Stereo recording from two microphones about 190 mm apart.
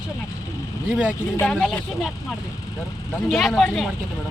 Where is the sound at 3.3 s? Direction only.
Centre (ahead or behind).